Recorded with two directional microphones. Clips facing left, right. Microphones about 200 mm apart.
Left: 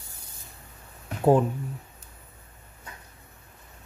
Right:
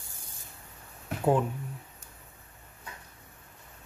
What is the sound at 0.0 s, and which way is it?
Spray, 50° right (ahead or behind).